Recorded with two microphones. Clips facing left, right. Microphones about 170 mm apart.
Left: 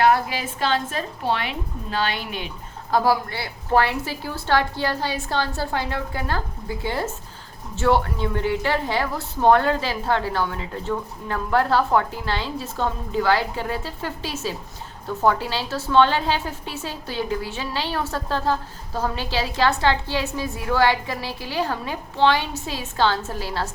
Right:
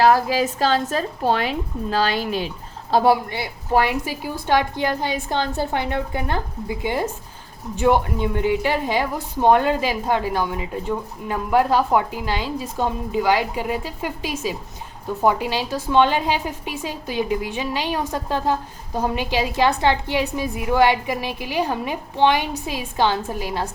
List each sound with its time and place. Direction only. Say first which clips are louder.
0.0 s speech: right 3 dB; 40° right (ahead or behind)
2.9 s a woman's voice: right 3 dB; 25° right (ahead or behind)